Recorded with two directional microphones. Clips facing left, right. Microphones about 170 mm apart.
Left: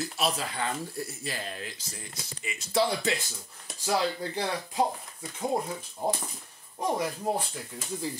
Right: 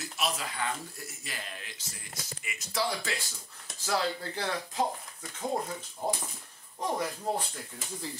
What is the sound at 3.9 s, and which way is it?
Speech, 15° left (ahead or behind).